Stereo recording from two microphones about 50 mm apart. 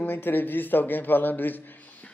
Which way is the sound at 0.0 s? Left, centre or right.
Left.